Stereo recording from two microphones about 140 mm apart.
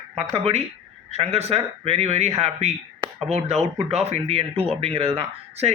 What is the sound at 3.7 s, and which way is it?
A man's voice, 50° right (ahead or behind).